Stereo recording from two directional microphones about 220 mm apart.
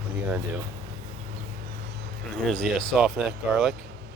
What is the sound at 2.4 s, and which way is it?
Speech, 5° left (ahead or behind).